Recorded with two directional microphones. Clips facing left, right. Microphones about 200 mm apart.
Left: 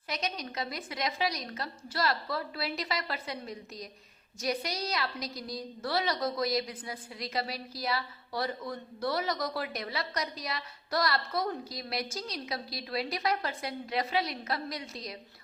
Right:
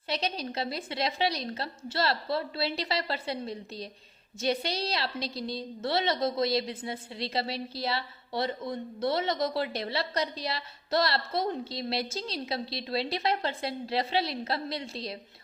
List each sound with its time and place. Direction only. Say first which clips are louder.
0.1 s a woman's voice: right 4 dB; 30° right (ahead or behind)